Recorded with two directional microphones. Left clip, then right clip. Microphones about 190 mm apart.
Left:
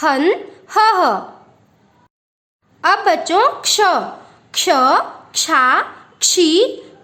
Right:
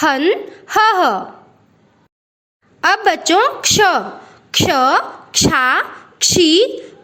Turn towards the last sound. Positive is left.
turn(degrees=-15)  # may be behind; listen again after turning